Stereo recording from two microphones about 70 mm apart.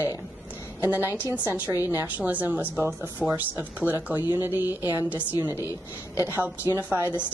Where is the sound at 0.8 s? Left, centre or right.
Right.